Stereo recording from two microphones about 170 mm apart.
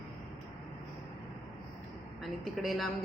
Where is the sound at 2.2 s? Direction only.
Centre (ahead or behind).